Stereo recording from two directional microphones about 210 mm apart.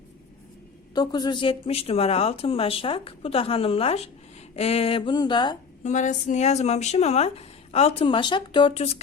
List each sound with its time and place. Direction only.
0.9 s speech: 20° left (ahead or behind)
5.8 s speech: 35° left (ahead or behind)